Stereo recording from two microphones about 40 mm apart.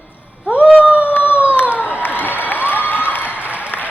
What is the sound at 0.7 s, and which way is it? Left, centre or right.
Howl, right.